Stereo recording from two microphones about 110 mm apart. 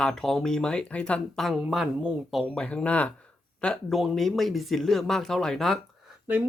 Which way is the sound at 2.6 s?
10° left (ahead or behind).